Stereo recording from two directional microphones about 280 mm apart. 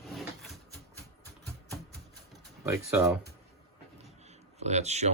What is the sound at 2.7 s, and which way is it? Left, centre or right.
Speech, centre.